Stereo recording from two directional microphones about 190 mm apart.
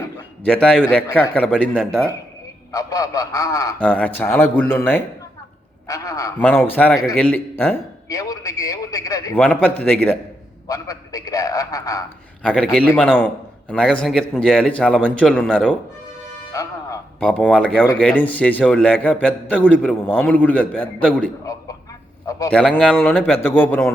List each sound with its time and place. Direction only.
0.4 s a man's voice: 5° left (ahead or behind)
2.7 s a man's voice: 20° left (ahead or behind)
3.8 s a man's voice: 5° left (ahead or behind)
9.3 s a man's voice: 5° left (ahead or behind)
10.7 s a man's voice: 20° left (ahead or behind)
12.4 s a man's voice: 5° left (ahead or behind)
16.5 s music: 15° left (ahead or behind)
17.2 s a man's voice: 5° left (ahead or behind)
22.7 s a man's voice: 5° left (ahead or behind)